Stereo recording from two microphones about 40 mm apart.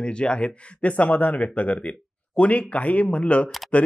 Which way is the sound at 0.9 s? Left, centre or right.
Left.